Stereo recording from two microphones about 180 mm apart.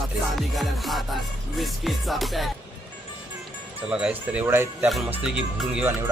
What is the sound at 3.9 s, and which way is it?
Speech, 5° right (ahead or behind).